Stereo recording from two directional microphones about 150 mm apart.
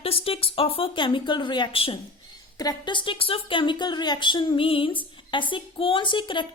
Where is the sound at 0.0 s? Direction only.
40° left (ahead or behind).